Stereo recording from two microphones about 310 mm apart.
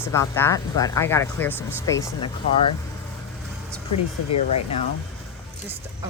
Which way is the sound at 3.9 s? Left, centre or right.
Left.